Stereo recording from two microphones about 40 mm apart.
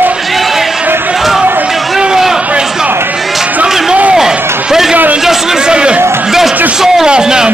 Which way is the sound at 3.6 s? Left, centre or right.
Centre.